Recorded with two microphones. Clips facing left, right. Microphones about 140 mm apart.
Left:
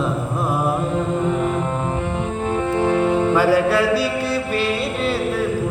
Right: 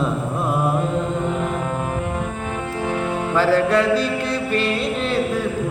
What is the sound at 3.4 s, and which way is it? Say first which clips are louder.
Mantra: right 3 dB; 10° left (ahead or behind).